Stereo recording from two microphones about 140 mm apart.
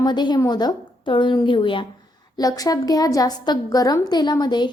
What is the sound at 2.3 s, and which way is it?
A woman's voice, 25° left (ahead or behind).